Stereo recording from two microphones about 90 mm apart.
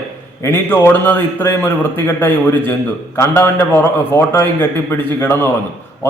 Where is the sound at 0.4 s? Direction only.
25° left (ahead or behind).